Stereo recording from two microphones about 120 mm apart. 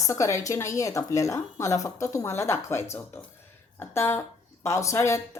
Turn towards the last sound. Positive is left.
turn(degrees=25)  # may be behind; listen again after turning